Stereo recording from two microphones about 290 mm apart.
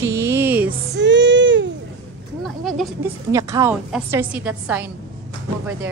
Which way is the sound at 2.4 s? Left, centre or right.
Centre.